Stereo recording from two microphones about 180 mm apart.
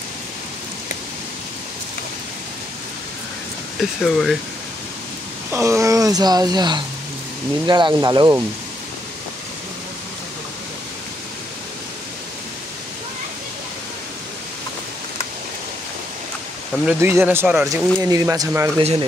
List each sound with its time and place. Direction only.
4.0 s speech: centre (ahead or behind)
5.5 s speech: 15° right (ahead or behind)
16.8 s speech: 10° right (ahead or behind)
18.8 s speech: 30° right (ahead or behind)